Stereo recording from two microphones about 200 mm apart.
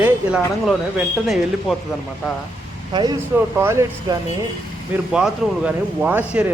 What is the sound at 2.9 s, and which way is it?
Speech, 20° right (ahead or behind).